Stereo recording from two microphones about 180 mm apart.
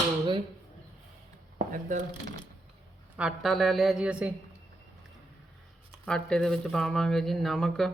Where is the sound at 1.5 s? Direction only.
45° right (ahead or behind).